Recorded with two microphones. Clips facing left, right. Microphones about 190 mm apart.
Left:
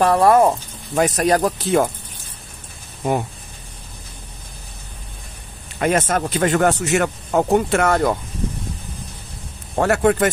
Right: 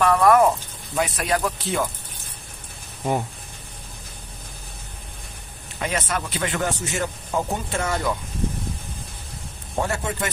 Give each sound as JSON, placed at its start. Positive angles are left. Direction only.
{"t": 0.0, "sound": "speech", "side_deg": 30}
{"t": 0.9, "sound": "speech", "side_deg": 45}
{"t": 5.8, "sound": "speech", "side_deg": 50}
{"t": 6.6, "sound": "speech", "side_deg": 70}
{"t": 9.8, "sound": "speech", "side_deg": 65}